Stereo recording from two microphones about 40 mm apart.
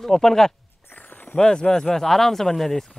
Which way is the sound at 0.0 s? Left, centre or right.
Centre.